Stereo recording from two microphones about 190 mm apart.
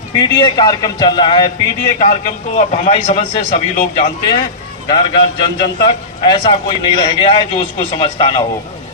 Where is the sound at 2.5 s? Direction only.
40° left (ahead or behind).